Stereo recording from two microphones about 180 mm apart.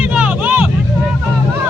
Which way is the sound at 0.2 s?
10° right (ahead or behind).